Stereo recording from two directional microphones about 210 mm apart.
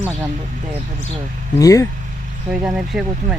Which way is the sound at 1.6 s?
15° left (ahead or behind).